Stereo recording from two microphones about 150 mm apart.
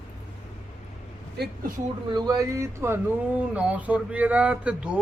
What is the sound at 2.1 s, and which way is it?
Speech, 25° right (ahead or behind).